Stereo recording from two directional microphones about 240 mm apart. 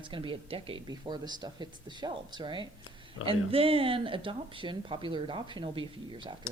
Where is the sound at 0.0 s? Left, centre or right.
Right.